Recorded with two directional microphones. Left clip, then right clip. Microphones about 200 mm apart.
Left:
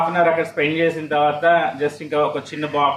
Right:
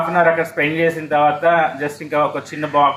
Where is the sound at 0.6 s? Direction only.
25° right (ahead or behind).